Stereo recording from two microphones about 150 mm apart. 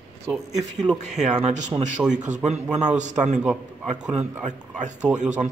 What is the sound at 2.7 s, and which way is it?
Speech, 50° right (ahead or behind).